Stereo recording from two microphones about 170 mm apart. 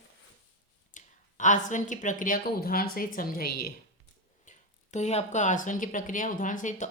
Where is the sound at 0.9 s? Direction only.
45° left (ahead or behind).